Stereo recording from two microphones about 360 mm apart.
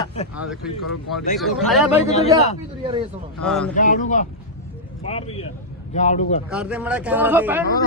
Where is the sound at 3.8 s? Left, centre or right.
Left.